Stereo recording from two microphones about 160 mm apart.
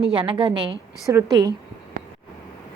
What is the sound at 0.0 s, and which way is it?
A woman's voice, 30° right (ahead or behind).